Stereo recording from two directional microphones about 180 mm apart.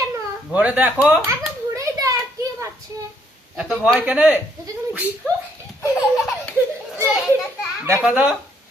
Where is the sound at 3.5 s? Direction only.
5° right (ahead or behind).